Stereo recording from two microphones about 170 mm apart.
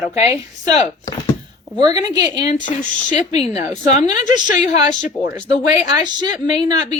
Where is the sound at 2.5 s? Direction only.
45° left (ahead or behind).